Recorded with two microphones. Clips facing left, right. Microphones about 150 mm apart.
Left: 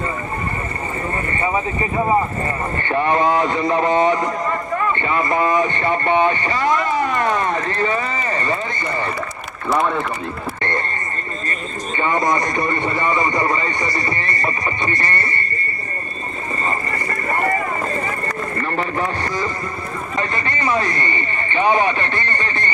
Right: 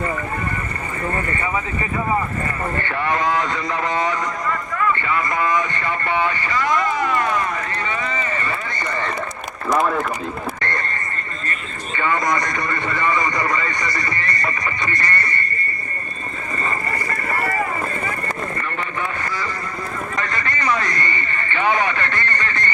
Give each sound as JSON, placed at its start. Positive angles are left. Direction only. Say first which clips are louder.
{"t": 1.1, "sound": "speech", "louder": "left 3 dB", "side_deg": 25}
{"t": 9.7, "sound": "a man's voice", "louder": "even", "side_deg": 0}
{"t": 10.6, "sound": "a sound", "louder": "left 3 dB", "side_deg": 20}
{"t": 11.9, "sound": "speech", "louder": "left 2 dB", "side_deg": 25}
{"t": 18.5, "sound": "a sound", "louder": "left 5 dB", "side_deg": 35}
{"t": 20.1, "sound": "speech", "louder": "left 4 dB", "side_deg": 25}